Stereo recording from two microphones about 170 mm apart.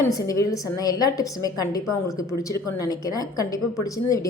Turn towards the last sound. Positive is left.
turn(degrees=20)  # may be behind; listen again after turning